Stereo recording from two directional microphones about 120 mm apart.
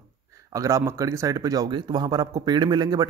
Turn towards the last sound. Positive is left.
turn(degrees=-35)  # may be behind; listen again after turning